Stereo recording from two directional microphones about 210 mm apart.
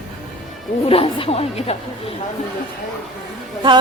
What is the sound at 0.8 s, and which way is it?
Speech, 25° left (ahead or behind).